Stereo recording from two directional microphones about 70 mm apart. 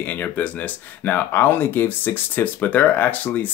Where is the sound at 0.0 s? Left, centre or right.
Left.